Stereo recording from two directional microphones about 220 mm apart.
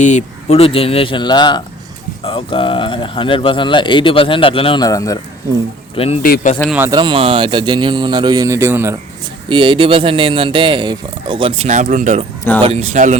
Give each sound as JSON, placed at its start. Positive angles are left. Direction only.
{"t": 0.0, "sound": "speech", "side_deg": 35}
{"t": 6.2, "sound": "speech", "side_deg": 40}
{"t": 6.6, "sound": "speech", "side_deg": -5}
{"t": 9.5, "sound": "speech", "side_deg": -20}